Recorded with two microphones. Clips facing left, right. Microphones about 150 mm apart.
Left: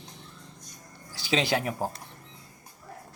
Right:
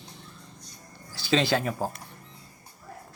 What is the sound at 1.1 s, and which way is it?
Speech, 15° left (ahead or behind).